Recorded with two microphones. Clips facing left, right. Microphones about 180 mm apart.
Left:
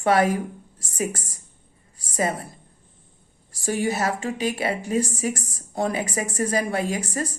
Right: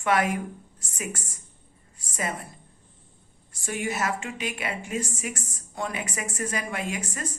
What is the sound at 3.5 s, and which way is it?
A woman's voice, 35° left (ahead or behind).